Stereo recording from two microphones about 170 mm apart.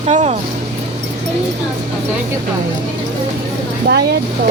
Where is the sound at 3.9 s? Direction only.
90° right.